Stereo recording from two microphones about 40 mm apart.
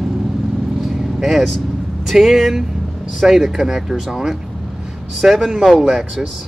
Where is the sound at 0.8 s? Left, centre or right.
Centre.